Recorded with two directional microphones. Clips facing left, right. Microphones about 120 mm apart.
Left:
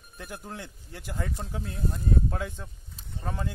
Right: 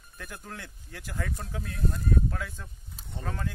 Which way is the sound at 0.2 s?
15° left (ahead or behind).